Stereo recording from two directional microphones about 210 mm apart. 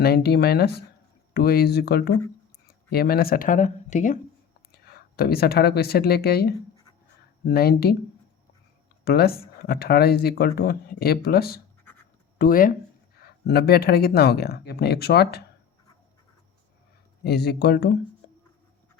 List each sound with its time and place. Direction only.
0.0 s speech: 50° left (ahead or behind)
4.7 s speech: 50° left (ahead or behind)
9.0 s speech: 45° left (ahead or behind)
17.2 s speech: 50° left (ahead or behind)